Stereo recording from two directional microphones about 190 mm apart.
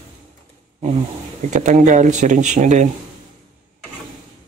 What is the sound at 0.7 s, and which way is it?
Speech, 35° right (ahead or behind).